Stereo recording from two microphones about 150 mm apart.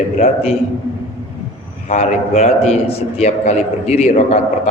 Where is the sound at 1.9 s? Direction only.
50° left (ahead or behind).